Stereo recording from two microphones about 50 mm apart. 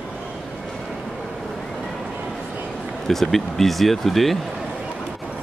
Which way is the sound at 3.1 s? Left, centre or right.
Centre.